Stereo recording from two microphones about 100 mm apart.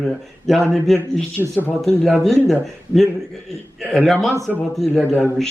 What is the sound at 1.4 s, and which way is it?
Speech, 15° right (ahead or behind).